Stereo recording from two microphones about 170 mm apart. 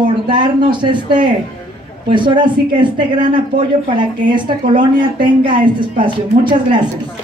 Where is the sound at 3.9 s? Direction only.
30° right (ahead or behind).